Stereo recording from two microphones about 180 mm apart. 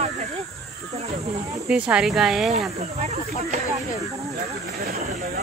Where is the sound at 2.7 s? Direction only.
35° right (ahead or behind).